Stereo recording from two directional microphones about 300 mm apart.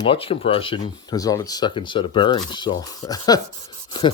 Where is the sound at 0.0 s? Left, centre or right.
Centre.